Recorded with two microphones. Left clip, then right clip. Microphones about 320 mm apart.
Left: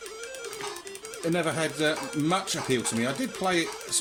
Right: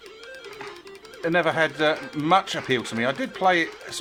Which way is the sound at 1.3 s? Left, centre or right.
Right.